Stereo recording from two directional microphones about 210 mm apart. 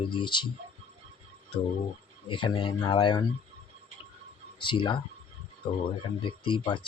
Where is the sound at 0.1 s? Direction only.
20° left (ahead or behind).